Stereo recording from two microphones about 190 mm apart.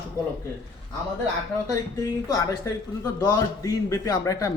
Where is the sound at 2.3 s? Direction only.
20° left (ahead or behind).